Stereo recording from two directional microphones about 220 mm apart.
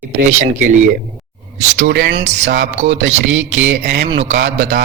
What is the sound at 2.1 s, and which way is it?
Speech, 30° right (ahead or behind).